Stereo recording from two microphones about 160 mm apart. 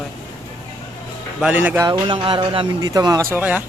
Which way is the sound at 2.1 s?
30° right (ahead or behind).